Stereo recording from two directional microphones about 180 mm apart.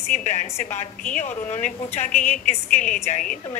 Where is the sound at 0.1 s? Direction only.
40° left (ahead or behind).